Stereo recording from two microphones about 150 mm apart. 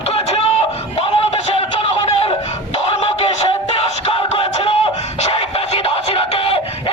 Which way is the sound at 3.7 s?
40° left (ahead or behind).